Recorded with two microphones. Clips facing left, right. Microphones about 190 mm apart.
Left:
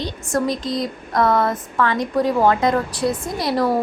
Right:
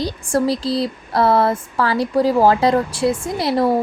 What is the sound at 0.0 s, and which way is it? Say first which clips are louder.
A woman's voice: right 3 dB; 30° right (ahead or behind).